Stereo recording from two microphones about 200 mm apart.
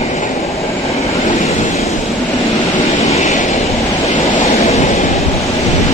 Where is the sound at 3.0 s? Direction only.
35° left (ahead or behind).